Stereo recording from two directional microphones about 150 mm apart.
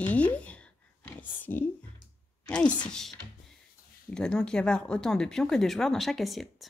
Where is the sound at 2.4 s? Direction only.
10° left (ahead or behind).